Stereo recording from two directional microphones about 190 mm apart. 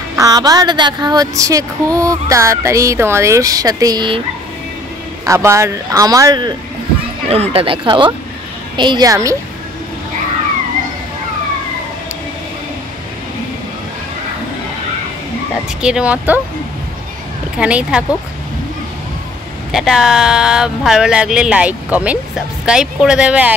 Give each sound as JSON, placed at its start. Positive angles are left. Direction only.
{"t": 0.1, "sound": "speech", "side_deg": -20}
{"t": 5.2, "sound": "speech", "side_deg": -15}
{"t": 7.2, "sound": "speech", "side_deg": -30}
{"t": 15.8, "sound": "speech", "side_deg": -5}
{"t": 17.6, "sound": "speech", "side_deg": -5}
{"t": 19.7, "sound": "speech", "side_deg": 0}